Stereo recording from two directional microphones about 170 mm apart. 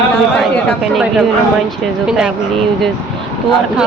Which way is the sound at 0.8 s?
Centre (ahead or behind).